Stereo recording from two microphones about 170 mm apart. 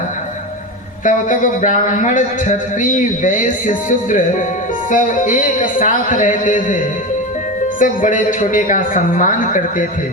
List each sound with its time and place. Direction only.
1.0 s speech: 50° left (ahead or behind)